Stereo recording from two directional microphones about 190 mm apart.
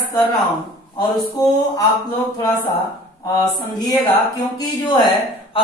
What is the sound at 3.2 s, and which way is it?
A woman's voice, 20° left (ahead or behind).